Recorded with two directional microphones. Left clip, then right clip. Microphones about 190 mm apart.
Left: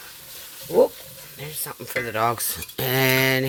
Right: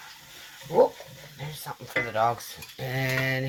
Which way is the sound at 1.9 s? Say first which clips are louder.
Left 2 dB; 70° left (ahead or behind).